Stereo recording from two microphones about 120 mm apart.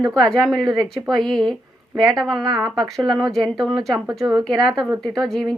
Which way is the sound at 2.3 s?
35° right (ahead or behind).